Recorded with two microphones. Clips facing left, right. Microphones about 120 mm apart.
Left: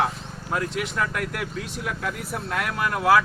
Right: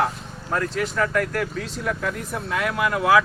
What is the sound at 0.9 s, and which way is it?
Speech, 50° right (ahead or behind).